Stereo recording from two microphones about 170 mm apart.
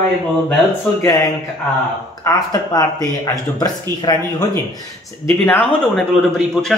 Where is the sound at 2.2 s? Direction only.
20° left (ahead or behind).